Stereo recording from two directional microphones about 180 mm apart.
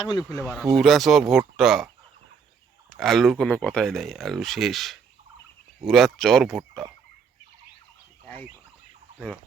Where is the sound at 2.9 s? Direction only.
Centre (ahead or behind).